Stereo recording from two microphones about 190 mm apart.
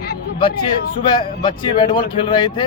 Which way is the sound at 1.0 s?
25° left (ahead or behind).